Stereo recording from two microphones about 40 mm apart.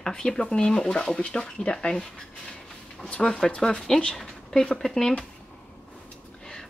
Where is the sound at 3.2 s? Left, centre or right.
Centre.